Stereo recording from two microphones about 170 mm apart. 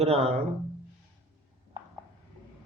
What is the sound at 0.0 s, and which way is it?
Mantra, 35° right (ahead or behind).